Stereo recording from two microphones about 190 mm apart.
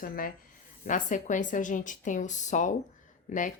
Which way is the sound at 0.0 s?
50° left (ahead or behind).